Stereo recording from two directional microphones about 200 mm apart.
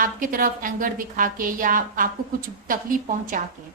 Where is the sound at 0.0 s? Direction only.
45° right (ahead or behind).